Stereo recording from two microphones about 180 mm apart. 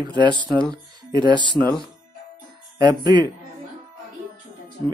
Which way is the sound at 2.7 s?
25° right (ahead or behind).